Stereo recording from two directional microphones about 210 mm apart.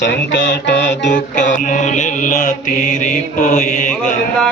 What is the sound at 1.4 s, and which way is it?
Mantra, 35° left (ahead or behind).